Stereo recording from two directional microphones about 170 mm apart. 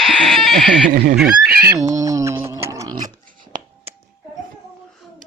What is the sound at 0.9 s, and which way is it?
Speech, 55° right (ahead or behind).